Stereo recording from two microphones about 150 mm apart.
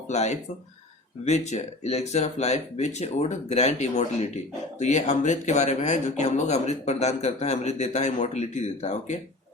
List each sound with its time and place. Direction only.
0.1 s speech: 50° left (ahead or behind)